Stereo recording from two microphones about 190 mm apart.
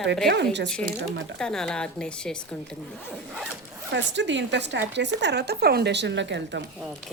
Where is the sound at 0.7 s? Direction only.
5° left (ahead or behind).